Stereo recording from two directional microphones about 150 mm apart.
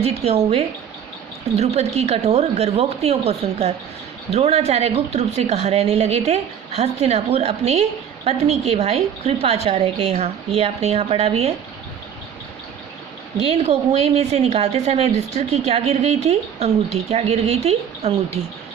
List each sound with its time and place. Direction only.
0.0 s a woman's voice: 40° right (ahead or behind)
13.3 s a woman's voice: 45° right (ahead or behind)